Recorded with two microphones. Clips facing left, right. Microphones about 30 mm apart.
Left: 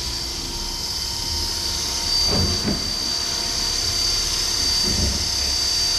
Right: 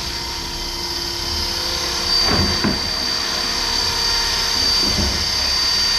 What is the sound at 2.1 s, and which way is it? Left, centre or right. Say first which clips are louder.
Wood: right 4 dB; right.